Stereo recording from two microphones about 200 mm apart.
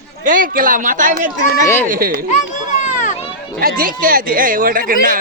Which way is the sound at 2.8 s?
40° left (ahead or behind).